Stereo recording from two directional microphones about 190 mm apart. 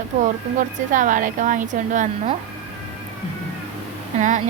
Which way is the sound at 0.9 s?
45° right (ahead or behind).